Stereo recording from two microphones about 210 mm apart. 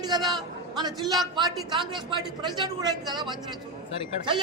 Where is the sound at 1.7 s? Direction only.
20° right (ahead or behind).